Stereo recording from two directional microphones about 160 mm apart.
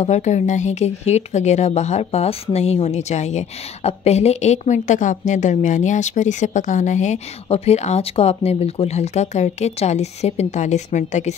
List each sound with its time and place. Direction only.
0.0 s speech: 45° left (ahead or behind)